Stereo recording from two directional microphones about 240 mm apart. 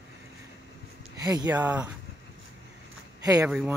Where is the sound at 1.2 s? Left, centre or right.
Centre.